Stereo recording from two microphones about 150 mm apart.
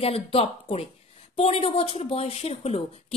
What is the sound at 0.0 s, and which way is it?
Speech, 40° left (ahead or behind).